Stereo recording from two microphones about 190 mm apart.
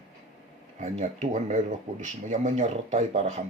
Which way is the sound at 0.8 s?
40° right (ahead or behind).